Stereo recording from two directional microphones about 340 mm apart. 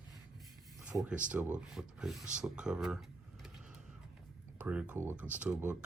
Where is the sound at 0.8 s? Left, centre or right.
Centre.